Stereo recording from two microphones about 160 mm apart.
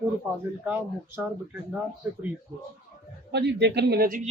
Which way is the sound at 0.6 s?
10° right (ahead or behind).